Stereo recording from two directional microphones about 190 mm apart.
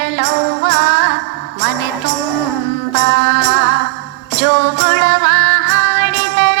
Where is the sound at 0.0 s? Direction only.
65° right (ahead or behind).